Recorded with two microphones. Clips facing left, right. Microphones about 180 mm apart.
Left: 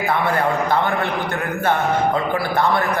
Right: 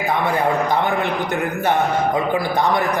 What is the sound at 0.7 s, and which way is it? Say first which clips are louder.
A man's voice: even; 15° right (ahead or behind).